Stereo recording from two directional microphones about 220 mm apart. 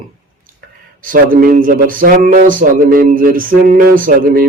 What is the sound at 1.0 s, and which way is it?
Speech, 40° right (ahead or behind).